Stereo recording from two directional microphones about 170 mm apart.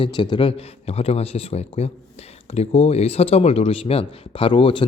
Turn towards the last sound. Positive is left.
turn(degrees=30)  # may be behind; listen again after turning